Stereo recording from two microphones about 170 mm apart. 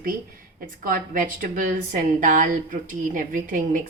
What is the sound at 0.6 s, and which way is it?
A woman's voice, 55° right (ahead or behind).